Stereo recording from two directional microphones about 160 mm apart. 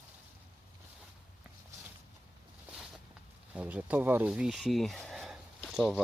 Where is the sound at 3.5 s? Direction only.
10° right (ahead or behind).